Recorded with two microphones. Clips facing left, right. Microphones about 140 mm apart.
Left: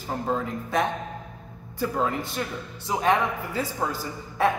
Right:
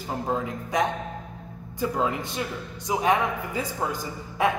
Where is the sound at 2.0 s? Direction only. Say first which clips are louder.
Even; 15° right (ahead or behind).